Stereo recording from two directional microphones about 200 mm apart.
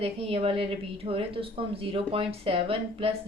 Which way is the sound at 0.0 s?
30° right (ahead or behind).